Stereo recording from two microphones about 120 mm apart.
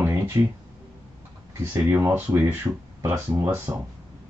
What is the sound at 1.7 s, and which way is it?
Speech, 20° right (ahead or behind).